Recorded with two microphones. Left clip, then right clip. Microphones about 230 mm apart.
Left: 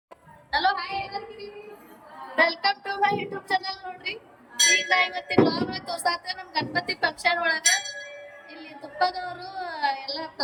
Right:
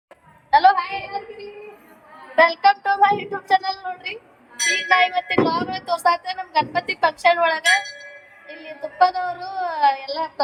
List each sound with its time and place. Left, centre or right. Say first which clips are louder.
0.5 s a woman's voice: right 10 dB; centre
2.3 s speech: right 7 dB; centre
8.4 s music: right 6 dB; centre
9.0 s speech: right 8 dB; centre